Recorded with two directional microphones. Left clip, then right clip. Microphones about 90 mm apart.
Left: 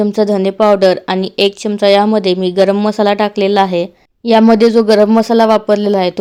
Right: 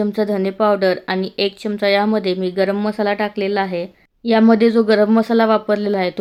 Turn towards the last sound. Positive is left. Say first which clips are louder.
# left 6 dB
turn(degrees=35)  # may be behind; listen again after turning